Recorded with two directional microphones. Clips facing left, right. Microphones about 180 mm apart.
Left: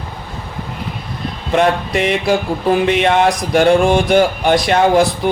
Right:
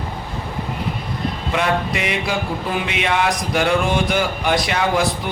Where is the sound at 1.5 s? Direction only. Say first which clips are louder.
Left 7 dB; 50° left (ahead or behind).